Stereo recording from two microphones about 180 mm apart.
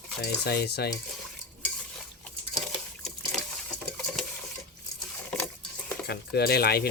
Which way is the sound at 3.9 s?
Centre (ahead or behind).